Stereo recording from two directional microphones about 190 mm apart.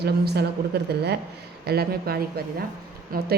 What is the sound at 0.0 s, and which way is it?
A woman's voice, 60° right (ahead or behind).